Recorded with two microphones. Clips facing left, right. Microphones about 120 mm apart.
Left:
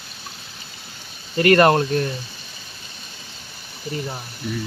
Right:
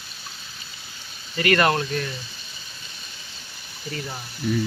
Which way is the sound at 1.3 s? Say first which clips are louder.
Left 6 dB; 45° left (ahead or behind).